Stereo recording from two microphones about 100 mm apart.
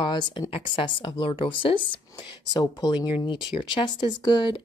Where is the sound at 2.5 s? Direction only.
45° left (ahead or behind).